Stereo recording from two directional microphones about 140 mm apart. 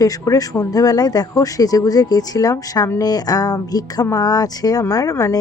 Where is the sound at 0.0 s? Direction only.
25° left (ahead or behind).